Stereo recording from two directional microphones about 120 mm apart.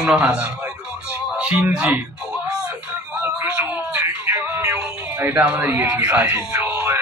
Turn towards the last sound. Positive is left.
turn(degrees=-15)  # may be behind; listen again after turning